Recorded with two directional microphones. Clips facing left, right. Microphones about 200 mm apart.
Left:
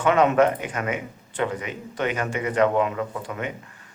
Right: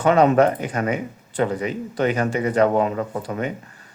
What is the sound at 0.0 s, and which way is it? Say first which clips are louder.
Speech: right 3 dB; 35° right (ahead or behind).